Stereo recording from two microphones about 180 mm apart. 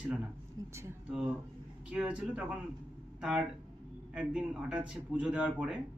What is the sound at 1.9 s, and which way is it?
A man's voice, 5° right (ahead or behind).